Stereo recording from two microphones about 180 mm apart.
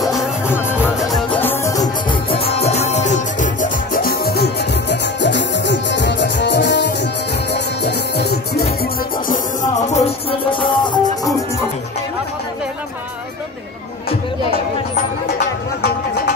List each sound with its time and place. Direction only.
0.0 s music: centre (ahead or behind)
0.5 s music: 10° left (ahead or behind)
1.0 s music: centre (ahead or behind)
1.4 s music: 15° left (ahead or behind)
2.3 s music: 35° left (ahead or behind); by 8.7 s 65° left (ahead or behind)
9.3 s music: 45° left (ahead or behind); by 11.0 s 25° left (ahead or behind)